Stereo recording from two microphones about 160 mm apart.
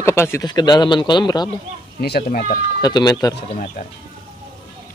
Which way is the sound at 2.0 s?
75° left (ahead or behind).